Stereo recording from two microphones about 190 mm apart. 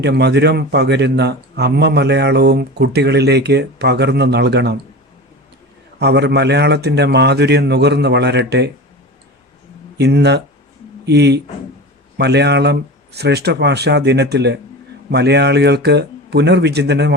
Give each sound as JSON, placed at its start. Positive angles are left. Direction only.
{"t": 0.0, "sound": "speech", "side_deg": -60}
{"t": 6.0, "sound": "speech", "side_deg": -60}
{"t": 10.0, "sound": "speech", "side_deg": -60}